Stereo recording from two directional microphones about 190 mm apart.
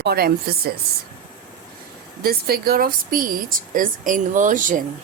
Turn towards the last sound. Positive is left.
turn(degrees=-45)  # may be behind; listen again after turning